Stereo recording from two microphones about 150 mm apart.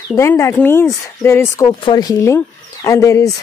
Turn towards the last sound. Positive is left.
turn(degrees=20)  # may be behind; listen again after turning